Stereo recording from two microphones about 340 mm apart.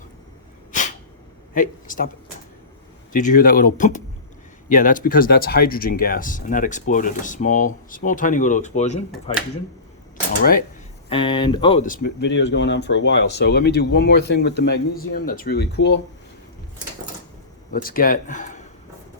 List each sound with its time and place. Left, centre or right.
1.5 s speech: left
3.1 s speech: left
11.1 s speech: centre; by 16.0 s left
17.7 s speech: left